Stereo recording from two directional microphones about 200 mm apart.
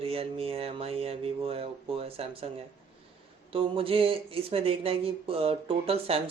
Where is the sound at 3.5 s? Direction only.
25° right (ahead or behind).